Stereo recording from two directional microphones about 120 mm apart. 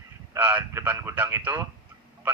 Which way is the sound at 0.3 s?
15° right (ahead or behind).